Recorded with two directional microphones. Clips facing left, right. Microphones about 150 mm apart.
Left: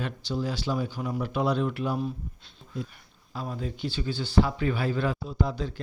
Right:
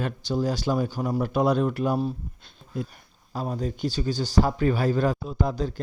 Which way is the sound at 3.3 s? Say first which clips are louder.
Right 5 dB; 40° right (ahead or behind).